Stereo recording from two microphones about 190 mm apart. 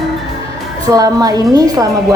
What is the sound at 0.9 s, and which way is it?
Speech, 20° right (ahead or behind).